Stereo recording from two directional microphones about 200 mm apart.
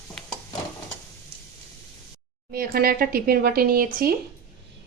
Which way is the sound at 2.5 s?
50° right (ahead or behind).